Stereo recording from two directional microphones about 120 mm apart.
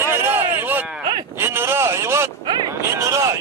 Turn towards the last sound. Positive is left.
turn(degrees=-25)  # may be behind; listen again after turning